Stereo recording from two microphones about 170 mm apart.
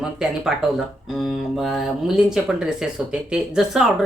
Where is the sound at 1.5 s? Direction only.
Centre (ahead or behind).